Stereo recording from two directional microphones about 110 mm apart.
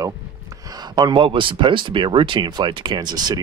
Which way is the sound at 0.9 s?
45° right (ahead or behind).